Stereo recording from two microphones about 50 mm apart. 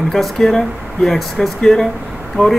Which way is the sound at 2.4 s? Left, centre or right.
Left.